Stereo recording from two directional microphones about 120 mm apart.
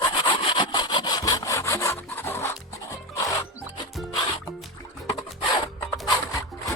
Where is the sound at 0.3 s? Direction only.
40° left (ahead or behind); by 2.5 s 20° left (ahead or behind).